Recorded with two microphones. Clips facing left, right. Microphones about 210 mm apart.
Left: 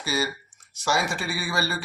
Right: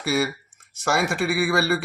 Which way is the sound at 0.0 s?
60° right (ahead or behind).